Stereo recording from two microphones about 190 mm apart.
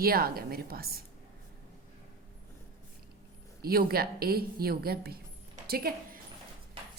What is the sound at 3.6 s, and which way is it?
A woman's voice, 50° right (ahead or behind).